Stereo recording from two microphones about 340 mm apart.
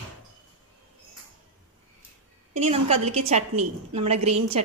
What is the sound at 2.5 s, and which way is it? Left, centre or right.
A woman's voice, centre.